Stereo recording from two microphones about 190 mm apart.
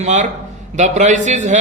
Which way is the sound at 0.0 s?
40° right (ahead or behind).